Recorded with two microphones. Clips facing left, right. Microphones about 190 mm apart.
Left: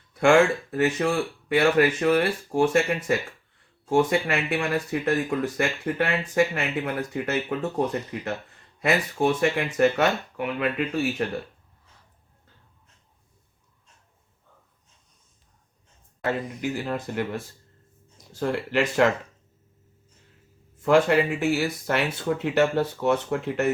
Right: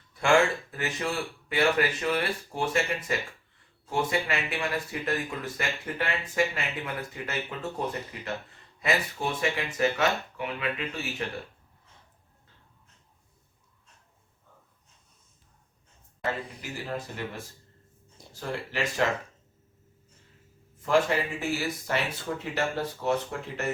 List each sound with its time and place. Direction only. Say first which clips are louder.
0.2 s speech: left 5 dB; 50° left (ahead or behind)
8.8 s speech: left 6 dB; 55° left (ahead or behind)
16.6 s speech: left 7 dB; 65° left (ahead or behind)
18.3 s speech: left 8 dB; 65° left (ahead or behind)
20.8 s speech: left 6 dB; 60° left (ahead or behind)